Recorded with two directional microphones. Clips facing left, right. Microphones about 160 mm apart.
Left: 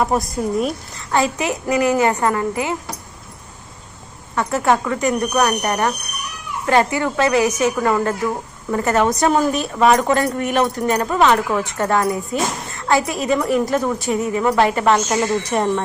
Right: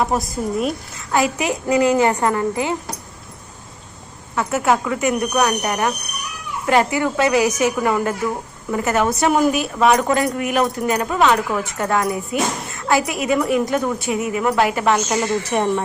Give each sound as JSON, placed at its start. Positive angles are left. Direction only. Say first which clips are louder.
{"t": 0.0, "sound": "speech", "louder": "left 1 dB", "side_deg": 0}
{"t": 1.4, "sound": "speech", "louder": "right 1 dB", "side_deg": -20}
{"t": 4.4, "sound": "a woman's voice", "louder": "left 1 dB", "side_deg": -5}
{"t": 12.3, "sound": "a child's voice", "louder": "right 2 dB", "side_deg": 30}
{"t": 13.1, "sound": "speech", "louder": "even", "side_deg": -5}
{"t": 14.3, "sound": "a woman's voice", "louder": "left 2 dB", "side_deg": -10}